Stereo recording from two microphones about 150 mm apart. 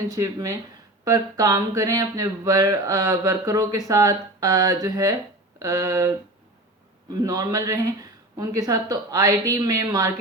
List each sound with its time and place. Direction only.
0.1 s speech: 25° right (ahead or behind)